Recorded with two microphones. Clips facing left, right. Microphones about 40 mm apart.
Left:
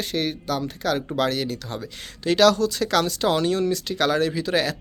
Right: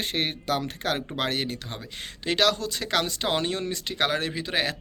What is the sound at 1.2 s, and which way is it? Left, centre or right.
Speech, right.